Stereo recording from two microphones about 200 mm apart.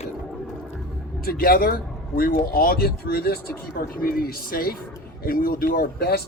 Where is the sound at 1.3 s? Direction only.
45° left (ahead or behind).